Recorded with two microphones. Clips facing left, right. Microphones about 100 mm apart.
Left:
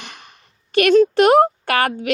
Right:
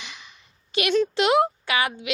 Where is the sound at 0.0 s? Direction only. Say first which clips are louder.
Left 3 dB; 50° left (ahead or behind).